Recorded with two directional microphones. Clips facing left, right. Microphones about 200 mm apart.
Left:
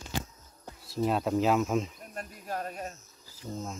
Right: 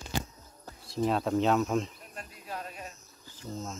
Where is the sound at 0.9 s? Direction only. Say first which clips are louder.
Even; centre (ahead or behind).